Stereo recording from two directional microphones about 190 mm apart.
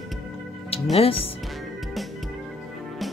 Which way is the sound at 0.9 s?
30° left (ahead or behind).